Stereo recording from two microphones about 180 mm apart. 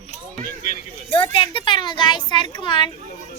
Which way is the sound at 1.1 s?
30° left (ahead or behind).